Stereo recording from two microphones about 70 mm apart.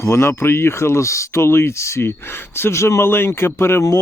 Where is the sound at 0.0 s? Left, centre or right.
Left.